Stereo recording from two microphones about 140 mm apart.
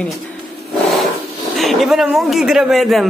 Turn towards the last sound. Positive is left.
turn(degrees=0)  # may be behind; listen again after turning